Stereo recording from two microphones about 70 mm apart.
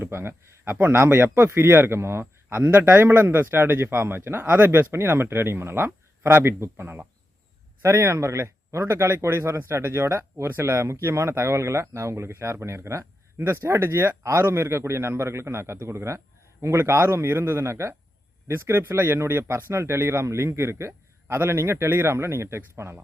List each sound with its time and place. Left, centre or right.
0.0 s speech: right
7.8 s speech: right